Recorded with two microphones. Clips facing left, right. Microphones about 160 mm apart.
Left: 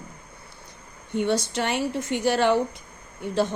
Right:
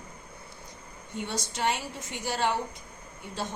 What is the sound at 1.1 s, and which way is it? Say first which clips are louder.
Speech: left 9 dB; 65° left (ahead or behind).